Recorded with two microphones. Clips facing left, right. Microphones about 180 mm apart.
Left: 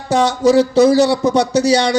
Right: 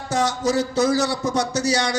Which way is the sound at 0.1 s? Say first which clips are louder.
Left 9 dB; 65° left (ahead or behind).